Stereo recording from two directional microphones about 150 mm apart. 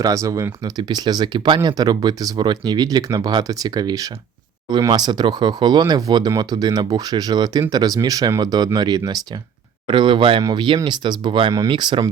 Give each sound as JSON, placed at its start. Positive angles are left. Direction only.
{"t": 0.0, "sound": "speech", "side_deg": -20}